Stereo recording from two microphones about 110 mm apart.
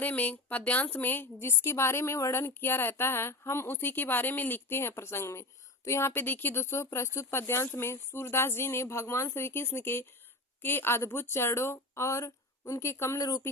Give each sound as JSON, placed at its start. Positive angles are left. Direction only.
{"t": 0.0, "sound": "a woman's voice", "side_deg": 15}